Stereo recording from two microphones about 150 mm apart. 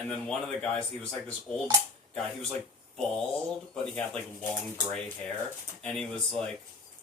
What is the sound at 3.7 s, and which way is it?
Speech, 10° left (ahead or behind).